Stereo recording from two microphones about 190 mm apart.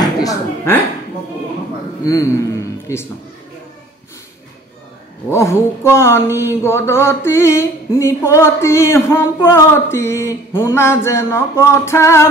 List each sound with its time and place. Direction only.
0.0 s a sound: 20° left (ahead or behind)
2.0 s a man's voice: 20° left (ahead or behind)
5.3 s mantra: 15° left (ahead or behind)